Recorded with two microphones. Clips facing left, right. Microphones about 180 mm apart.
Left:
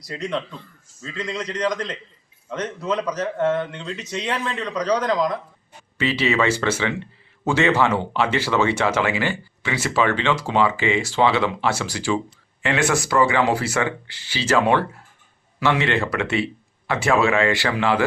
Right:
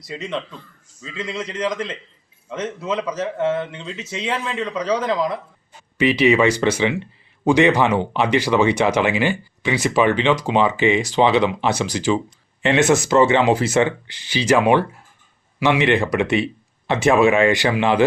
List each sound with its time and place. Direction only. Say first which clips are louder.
0.0 s speech: left 1 dB; centre (ahead or behind)
6.0 s speech: right 5 dB; 15° right (ahead or behind)